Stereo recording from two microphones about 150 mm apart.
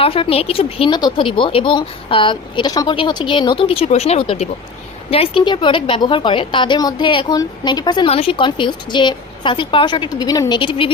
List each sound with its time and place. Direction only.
0.0 s speech: 40° left (ahead or behind)